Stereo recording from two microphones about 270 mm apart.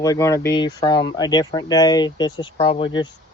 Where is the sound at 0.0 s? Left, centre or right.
Centre.